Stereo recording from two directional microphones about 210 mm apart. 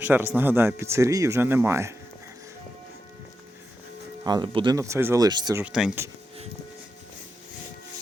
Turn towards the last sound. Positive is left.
turn(degrees=-5)  # may be behind; listen again after turning